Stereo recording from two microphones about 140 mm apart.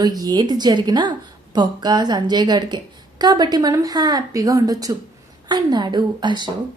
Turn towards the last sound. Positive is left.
turn(degrees=-30)  # may be behind; listen again after turning